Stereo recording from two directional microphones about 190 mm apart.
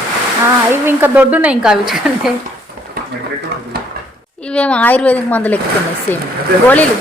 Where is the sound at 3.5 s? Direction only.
60° right (ahead or behind).